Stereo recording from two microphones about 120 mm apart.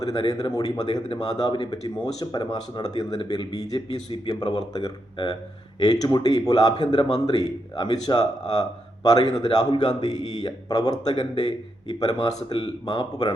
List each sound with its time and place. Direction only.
0.0 s speech: 30° left (ahead or behind)